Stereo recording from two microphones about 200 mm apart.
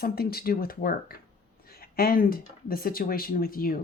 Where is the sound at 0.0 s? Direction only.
50° left (ahead or behind).